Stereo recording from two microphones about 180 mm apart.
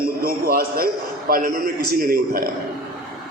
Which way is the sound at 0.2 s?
55° right (ahead or behind).